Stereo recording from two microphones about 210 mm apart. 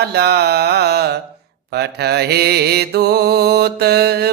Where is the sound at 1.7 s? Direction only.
50° right (ahead or behind).